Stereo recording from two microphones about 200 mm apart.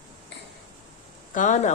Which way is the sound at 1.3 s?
40° left (ahead or behind).